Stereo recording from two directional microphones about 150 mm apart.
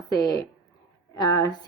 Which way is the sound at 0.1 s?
25° left (ahead or behind).